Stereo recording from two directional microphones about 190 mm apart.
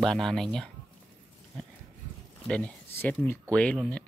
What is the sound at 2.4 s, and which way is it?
Speech, 5° left (ahead or behind).